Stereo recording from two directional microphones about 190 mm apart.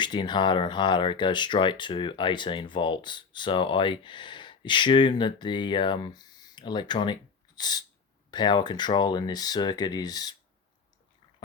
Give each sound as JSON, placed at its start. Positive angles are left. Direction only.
{"t": 0.0, "sound": "speech", "side_deg": 25}